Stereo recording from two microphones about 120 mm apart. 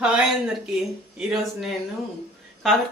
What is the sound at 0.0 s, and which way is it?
Speech, 5° right (ahead or behind).